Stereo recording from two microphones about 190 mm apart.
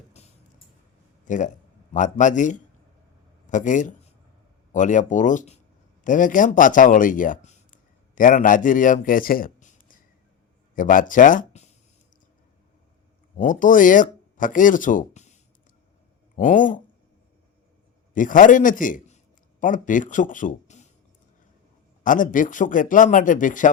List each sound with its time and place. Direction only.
1.2 s a man's voice: 40° left (ahead or behind)
10.8 s speech: 45° left (ahead or behind)
13.3 s a man's voice: 45° left (ahead or behind)
18.1 s a man's voice: 45° left (ahead or behind)
22.0 s a man's voice: 45° left (ahead or behind)